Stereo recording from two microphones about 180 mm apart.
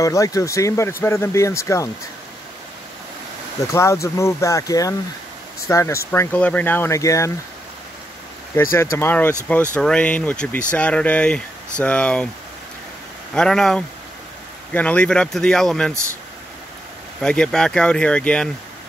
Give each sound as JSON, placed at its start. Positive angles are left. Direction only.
{"t": 0.0, "sound": "speech", "side_deg": 20}
{"t": 3.7, "sound": "speech", "side_deg": 15}
{"t": 8.9, "sound": "speech", "side_deg": 10}
{"t": 13.3, "sound": "speech", "side_deg": 5}
{"t": 17.2, "sound": "speech", "side_deg": 5}